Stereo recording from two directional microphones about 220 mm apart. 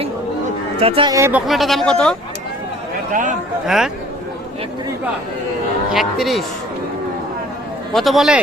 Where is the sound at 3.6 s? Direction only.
Centre (ahead or behind).